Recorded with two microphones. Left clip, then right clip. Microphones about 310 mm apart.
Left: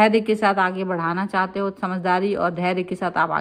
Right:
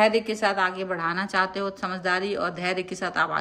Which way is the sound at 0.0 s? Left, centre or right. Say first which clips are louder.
Left 4 dB; centre.